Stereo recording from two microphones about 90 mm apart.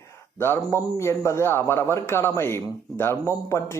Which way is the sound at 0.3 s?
25° left (ahead or behind).